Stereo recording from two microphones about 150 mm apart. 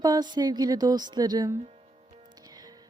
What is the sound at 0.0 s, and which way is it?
A woman's voice, 25° right (ahead or behind).